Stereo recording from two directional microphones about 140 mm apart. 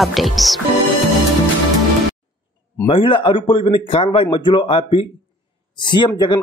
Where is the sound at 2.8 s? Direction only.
40° left (ahead or behind).